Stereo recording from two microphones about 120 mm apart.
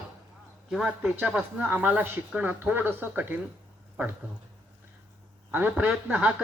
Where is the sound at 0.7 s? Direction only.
5° right (ahead or behind).